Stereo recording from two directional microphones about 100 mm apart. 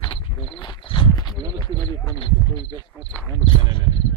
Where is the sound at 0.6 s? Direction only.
55° left (ahead or behind).